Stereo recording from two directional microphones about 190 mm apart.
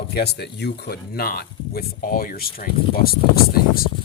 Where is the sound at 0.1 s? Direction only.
60° left (ahead or behind).